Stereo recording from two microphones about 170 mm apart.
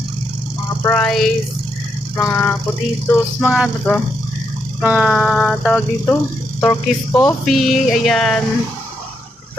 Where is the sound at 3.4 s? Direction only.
Centre (ahead or behind).